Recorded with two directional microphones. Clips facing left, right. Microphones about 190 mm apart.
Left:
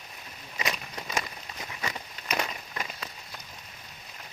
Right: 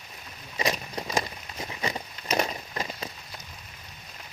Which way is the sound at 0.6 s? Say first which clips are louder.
Right 5 dB; 35° right (ahead or behind).